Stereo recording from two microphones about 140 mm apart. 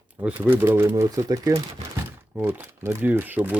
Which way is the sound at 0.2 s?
15° right (ahead or behind).